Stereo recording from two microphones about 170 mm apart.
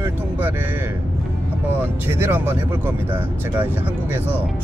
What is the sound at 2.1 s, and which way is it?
Speech, 10° right (ahead or behind).